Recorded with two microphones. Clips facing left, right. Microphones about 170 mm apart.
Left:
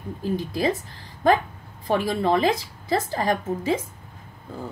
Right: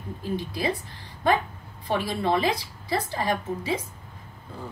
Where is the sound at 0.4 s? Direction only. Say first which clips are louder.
Left 4 dB; 45° left (ahead or behind).